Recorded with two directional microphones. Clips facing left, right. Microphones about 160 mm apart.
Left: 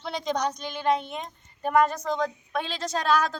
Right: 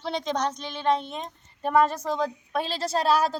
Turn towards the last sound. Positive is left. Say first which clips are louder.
# right 2 dB
turn(degrees=-35)  # may be behind; listen again after turning